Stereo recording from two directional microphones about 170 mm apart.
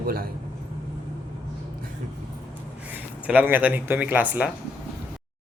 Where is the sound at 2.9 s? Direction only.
10° right (ahead or behind).